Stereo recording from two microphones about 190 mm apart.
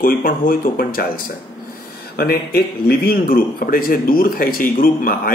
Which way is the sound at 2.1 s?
55° left (ahead or behind).